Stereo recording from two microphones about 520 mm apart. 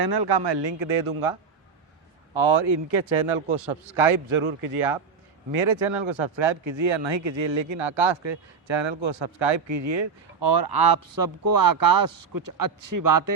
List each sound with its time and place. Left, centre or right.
0.0 s speech: right
2.3 s speech: right